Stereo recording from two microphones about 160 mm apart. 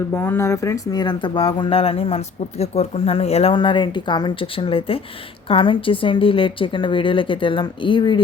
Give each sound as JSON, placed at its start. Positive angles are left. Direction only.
{"t": 0.1, "sound": "speech", "side_deg": 15}